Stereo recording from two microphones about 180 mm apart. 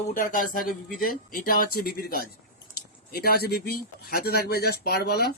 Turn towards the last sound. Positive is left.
turn(degrees=60)  # may be behind; listen again after turning